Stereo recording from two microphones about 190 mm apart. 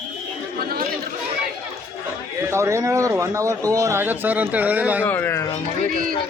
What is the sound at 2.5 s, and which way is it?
Speech, 15° right (ahead or behind).